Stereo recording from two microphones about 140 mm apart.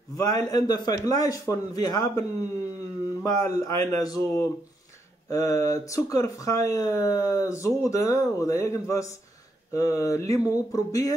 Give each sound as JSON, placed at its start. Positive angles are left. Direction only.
{"t": 0.2, "sound": "speech", "side_deg": 25}
{"t": 3.3, "sound": "speech", "side_deg": 25}